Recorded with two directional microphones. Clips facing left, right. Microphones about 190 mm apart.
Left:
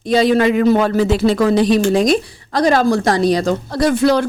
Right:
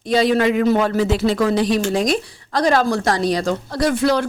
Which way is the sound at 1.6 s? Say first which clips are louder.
Left 5 dB; 20° left (ahead or behind).